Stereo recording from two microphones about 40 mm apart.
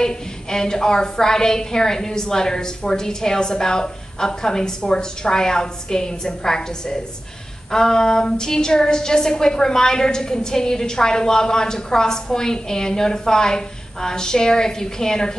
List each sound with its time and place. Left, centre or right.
0.0 s a woman's voice: centre